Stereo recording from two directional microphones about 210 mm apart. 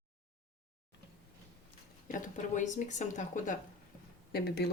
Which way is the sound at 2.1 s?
35° left (ahead or behind).